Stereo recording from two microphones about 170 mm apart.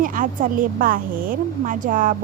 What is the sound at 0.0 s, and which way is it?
Speech, 55° right (ahead or behind).